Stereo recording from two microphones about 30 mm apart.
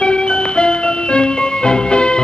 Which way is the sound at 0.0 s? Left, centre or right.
Left.